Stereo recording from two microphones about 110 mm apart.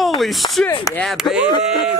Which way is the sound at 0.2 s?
Centre (ahead or behind).